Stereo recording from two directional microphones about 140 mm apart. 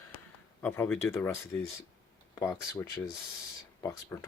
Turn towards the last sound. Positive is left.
turn(degrees=20)  # may be behind; listen again after turning